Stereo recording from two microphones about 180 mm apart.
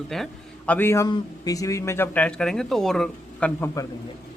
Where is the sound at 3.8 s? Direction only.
20° left (ahead or behind).